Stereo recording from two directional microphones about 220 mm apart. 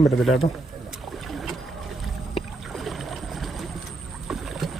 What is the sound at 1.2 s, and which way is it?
Boat, centre (ahead or behind).